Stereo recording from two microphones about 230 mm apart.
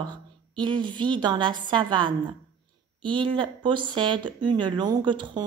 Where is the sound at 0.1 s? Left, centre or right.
Centre.